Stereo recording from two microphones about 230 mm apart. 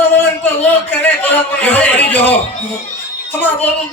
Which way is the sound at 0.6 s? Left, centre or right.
Centre.